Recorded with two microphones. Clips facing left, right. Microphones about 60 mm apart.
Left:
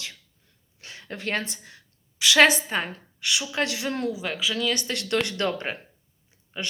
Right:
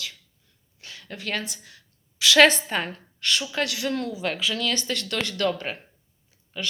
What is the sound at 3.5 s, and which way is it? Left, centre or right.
Speech, left.